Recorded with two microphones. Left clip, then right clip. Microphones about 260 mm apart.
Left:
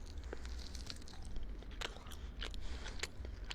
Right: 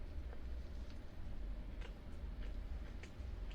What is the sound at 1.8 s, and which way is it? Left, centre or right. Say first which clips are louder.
Biting: left 15 dB; left.